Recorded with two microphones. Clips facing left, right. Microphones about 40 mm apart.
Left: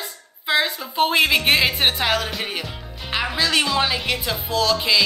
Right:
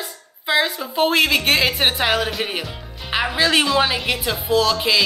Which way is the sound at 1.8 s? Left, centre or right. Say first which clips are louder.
Right 2 dB; centre.